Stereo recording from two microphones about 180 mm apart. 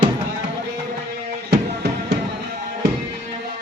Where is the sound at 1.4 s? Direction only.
60° right (ahead or behind).